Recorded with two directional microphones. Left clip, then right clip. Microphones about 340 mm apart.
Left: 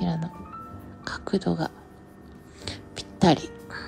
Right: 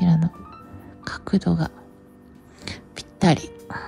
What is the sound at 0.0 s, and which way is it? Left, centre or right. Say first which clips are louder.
Music: right 6 dB; centre.